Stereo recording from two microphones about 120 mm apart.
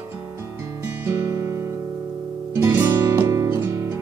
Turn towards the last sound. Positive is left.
turn(degrees=-20)  # may be behind; listen again after turning